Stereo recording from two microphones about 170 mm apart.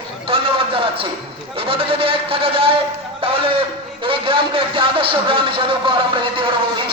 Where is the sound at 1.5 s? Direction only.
35° right (ahead or behind).